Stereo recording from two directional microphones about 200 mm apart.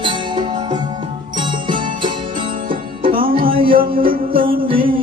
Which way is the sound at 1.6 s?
25° right (ahead or behind).